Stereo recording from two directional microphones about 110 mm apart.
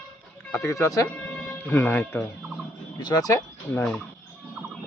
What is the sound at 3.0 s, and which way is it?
Speech, 35° left (ahead or behind).